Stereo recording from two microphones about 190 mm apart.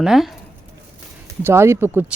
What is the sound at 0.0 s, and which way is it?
Speech, centre (ahead or behind).